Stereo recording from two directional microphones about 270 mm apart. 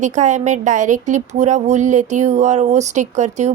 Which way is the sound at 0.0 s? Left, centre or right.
Right.